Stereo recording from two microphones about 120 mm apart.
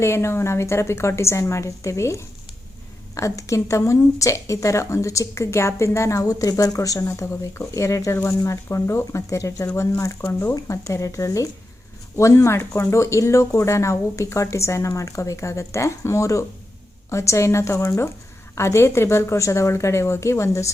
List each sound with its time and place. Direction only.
0.0 s speech: 20° left (ahead or behind)